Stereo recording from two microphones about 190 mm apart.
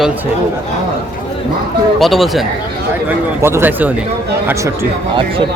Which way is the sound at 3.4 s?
10° right (ahead or behind).